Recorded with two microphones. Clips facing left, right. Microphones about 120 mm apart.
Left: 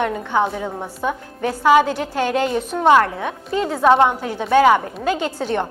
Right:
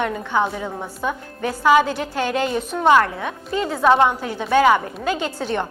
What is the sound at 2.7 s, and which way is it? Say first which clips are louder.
A woman's voice: left 1 dB; 35° left (ahead or behind).